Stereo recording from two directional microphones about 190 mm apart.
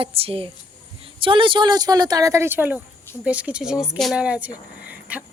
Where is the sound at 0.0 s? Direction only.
30° right (ahead or behind); by 5.2 s 5° right (ahead or behind).